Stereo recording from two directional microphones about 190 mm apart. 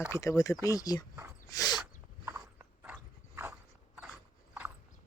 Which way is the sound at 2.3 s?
15° right (ahead or behind).